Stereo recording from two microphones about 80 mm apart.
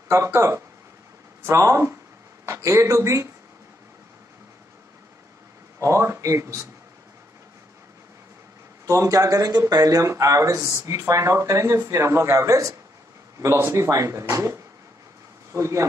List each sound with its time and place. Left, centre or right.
0.1 s speech: right
5.8 s speech: right
8.8 s speech: right